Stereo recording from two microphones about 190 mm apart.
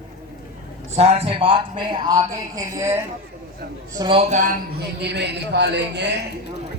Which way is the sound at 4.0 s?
30° right (ahead or behind).